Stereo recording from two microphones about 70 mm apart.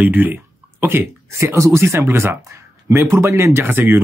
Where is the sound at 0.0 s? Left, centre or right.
Right.